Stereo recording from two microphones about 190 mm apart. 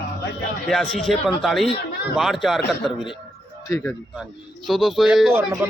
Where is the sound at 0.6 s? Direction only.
Centre (ahead or behind).